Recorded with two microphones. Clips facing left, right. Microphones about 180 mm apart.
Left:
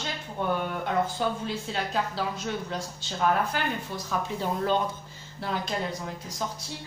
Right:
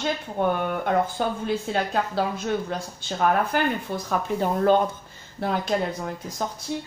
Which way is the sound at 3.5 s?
55° right (ahead or behind).